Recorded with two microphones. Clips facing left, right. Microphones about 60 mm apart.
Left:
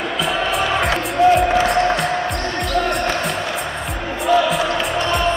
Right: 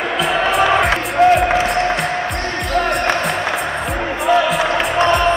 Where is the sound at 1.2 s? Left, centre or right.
Right.